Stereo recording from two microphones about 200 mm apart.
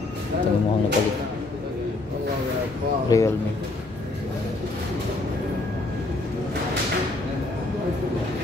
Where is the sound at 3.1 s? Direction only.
15° left (ahead or behind).